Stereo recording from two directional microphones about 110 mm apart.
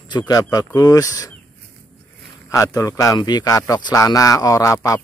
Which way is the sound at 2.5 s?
30° left (ahead or behind).